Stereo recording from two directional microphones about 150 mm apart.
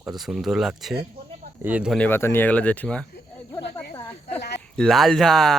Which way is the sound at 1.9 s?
10° left (ahead or behind).